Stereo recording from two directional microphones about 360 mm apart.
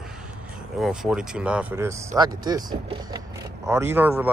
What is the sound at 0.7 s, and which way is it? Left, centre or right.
Speech, centre.